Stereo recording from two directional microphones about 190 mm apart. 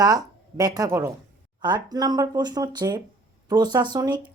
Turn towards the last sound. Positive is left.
turn(degrees=-20)  # may be behind; listen again after turning